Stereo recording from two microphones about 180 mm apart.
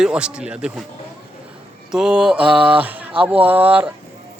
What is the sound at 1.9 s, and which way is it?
A man's voice, 5° right (ahead or behind).